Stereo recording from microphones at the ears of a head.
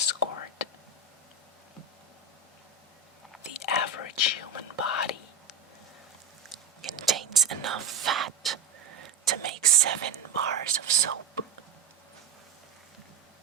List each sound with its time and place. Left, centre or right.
0.0 s whispering: left
3.5 s whispering: left
6.8 s whispering: right